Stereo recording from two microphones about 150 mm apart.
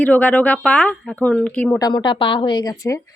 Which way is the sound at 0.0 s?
10° left (ahead or behind).